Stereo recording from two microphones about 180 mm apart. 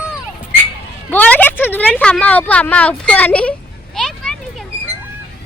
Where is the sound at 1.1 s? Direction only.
10° left (ahead or behind).